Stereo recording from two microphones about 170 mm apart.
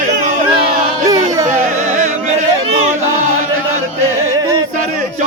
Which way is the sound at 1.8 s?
45° right (ahead or behind).